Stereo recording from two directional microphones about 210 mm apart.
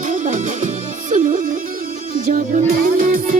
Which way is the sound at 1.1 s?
40° right (ahead or behind).